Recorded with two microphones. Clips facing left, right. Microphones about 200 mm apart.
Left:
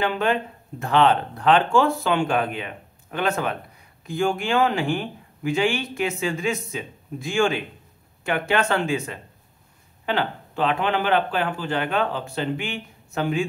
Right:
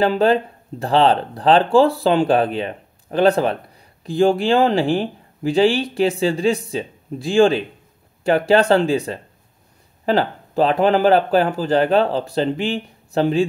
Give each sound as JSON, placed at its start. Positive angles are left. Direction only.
{"t": 0.0, "sound": "speech", "side_deg": -35}